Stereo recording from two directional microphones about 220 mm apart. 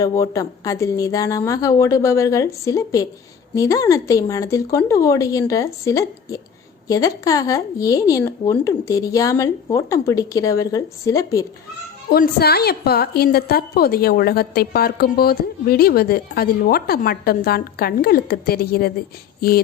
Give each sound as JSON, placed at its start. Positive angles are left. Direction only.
{"t": 0.0, "sound": "speech", "side_deg": 15}
{"t": 12.0, "sound": "a woman's voice", "side_deg": 45}